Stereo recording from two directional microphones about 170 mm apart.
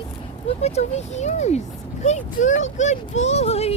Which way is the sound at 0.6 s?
40° left (ahead or behind).